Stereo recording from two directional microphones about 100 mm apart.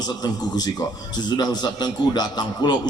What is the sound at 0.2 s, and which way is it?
A man's voice, 40° left (ahead or behind).